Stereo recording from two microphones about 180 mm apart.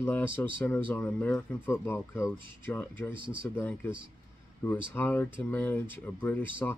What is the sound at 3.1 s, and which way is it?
Speech, 25° right (ahead or behind).